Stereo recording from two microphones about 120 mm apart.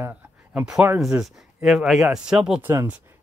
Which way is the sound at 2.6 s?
20° right (ahead or behind).